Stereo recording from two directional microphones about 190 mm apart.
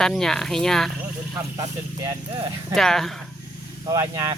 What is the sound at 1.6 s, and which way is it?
Speech, 25° right (ahead or behind).